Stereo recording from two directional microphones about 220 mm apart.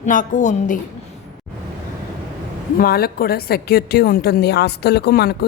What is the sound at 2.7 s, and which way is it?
A woman's voice, 45° left (ahead or behind).